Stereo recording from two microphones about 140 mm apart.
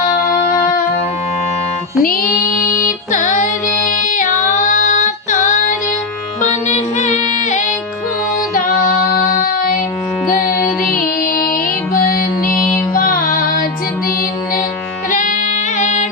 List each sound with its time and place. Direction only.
0.0 s music: 75° left (ahead or behind)
2.0 s music: 90° left
2.8 s music: 65° left (ahead or behind)
8.5 s child singing: 75° left (ahead or behind)
10.9 s music: 85° left
15.1 s music: 65° left (ahead or behind)